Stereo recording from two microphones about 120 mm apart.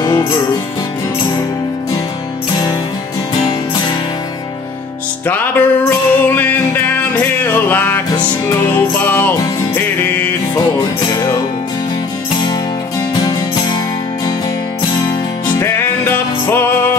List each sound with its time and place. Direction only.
0.0 s music: 30° left (ahead or behind)
5.2 s music: 15° left (ahead or behind)
15.6 s music: 20° left (ahead or behind)